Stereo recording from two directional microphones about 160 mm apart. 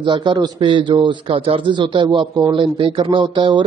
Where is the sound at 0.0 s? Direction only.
30° right (ahead or behind).